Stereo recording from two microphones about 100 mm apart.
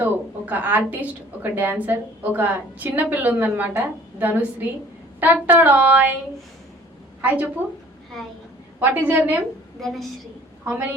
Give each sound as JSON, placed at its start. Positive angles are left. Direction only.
{"t": 0.0, "sound": "a woman's voice", "side_deg": -15}
{"t": 5.2, "sound": "child singing", "side_deg": -20}
{"t": 7.2, "sound": "a woman's voice", "side_deg": -20}
{"t": 8.1, "sound": "a woman's voice", "side_deg": 5}
{"t": 8.8, "sound": "a woman's voice", "side_deg": -20}
{"t": 9.8, "sound": "a woman's voice", "side_deg": 0}